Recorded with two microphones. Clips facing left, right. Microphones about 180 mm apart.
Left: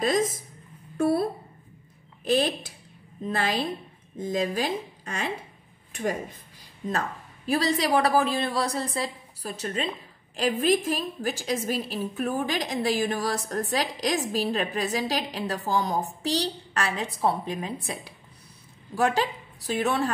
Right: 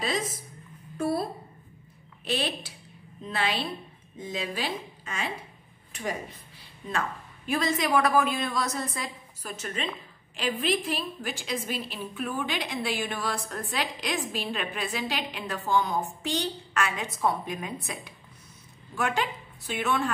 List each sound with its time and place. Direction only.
0.9 s a woman's voice: 55° left (ahead or behind)
2.2 s a woman's voice: 45° left (ahead or behind)
6.9 s a woman's voice: 35° left (ahead or behind)